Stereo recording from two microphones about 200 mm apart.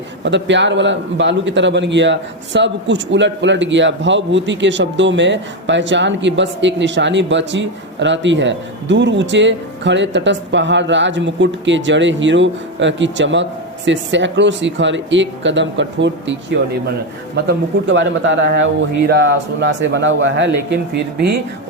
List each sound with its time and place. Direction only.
0.3 s a man's voice: 65° right (ahead or behind)
17.8 s a man's voice: 65° right (ahead or behind)
19.8 s speech: 65° right (ahead or behind)